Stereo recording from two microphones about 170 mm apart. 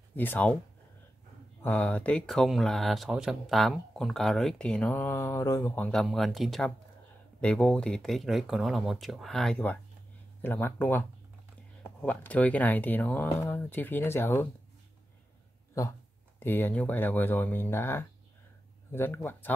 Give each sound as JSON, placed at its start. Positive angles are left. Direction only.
{"t": 0.1, "sound": "speech", "side_deg": 10}
{"t": 1.6, "sound": "speech", "side_deg": 10}
{"t": 15.8, "sound": "speech", "side_deg": 15}